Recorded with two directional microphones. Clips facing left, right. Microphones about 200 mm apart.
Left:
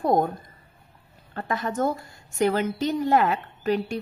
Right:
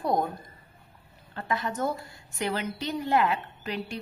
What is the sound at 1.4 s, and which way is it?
A woman's voice, 45° left (ahead or behind).